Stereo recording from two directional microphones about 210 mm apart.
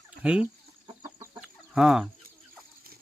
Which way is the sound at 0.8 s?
20° right (ahead or behind).